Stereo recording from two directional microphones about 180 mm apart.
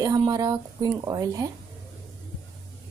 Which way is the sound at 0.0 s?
20° right (ahead or behind).